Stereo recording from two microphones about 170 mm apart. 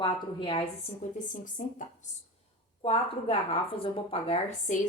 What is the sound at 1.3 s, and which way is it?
Speech, 50° left (ahead or behind).